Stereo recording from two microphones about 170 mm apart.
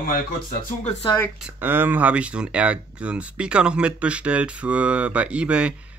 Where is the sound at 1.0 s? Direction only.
20° left (ahead or behind).